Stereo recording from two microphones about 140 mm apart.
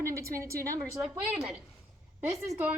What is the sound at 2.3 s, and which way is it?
Speech, 20° right (ahead or behind).